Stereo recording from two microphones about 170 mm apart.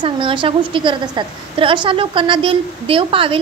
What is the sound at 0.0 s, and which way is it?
A woman's voice, 30° right (ahead or behind).